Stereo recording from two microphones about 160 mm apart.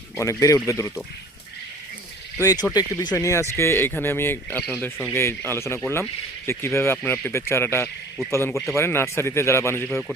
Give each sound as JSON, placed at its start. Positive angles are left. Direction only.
{"t": 0.2, "sound": "speech", "side_deg": 20}
{"t": 2.4, "sound": "speech", "side_deg": 20}
{"t": 9.9, "sound": "speech", "side_deg": 0}